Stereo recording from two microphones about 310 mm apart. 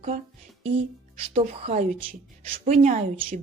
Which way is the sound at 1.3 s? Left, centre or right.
Centre.